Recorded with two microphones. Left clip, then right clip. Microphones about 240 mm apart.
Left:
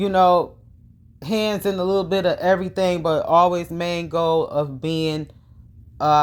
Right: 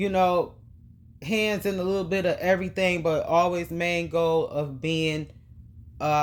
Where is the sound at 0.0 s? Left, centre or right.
Left.